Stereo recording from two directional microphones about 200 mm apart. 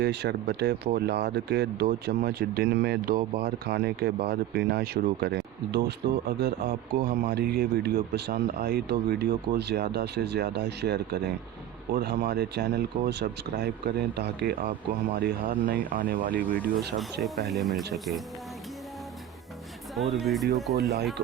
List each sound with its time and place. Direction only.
0.0 s a man's voice: 55° right (ahead or behind)
16.6 s speech: centre (ahead or behind)
20.0 s speech: centre (ahead or behind)